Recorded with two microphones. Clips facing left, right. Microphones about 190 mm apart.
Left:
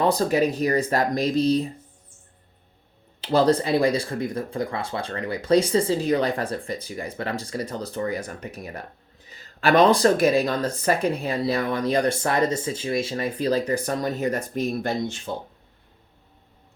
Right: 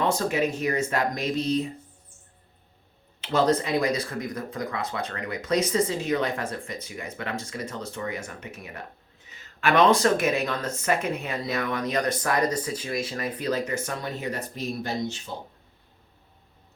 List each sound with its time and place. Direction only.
0.0 s speech: 35° left (ahead or behind)
3.2 s speech: 35° left (ahead or behind); by 15.2 s 50° left (ahead or behind)